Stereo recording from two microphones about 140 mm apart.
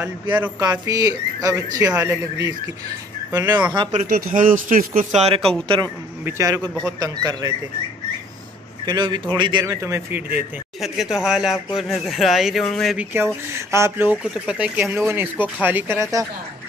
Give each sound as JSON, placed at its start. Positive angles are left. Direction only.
{"t": 0.0, "sound": "speech", "side_deg": -10}
{"t": 0.6, "sound": "speech", "side_deg": -25}
{"t": 3.9, "sound": "a man's voice", "side_deg": -70}
{"t": 5.1, "sound": "speech", "side_deg": -50}
{"t": 6.2, "sound": "speech", "side_deg": -20}
{"t": 8.8, "sound": "a man's voice", "side_deg": -30}
{"t": 10.8, "sound": "speech", "side_deg": -5}
{"t": 12.9, "sound": "speech", "side_deg": -15}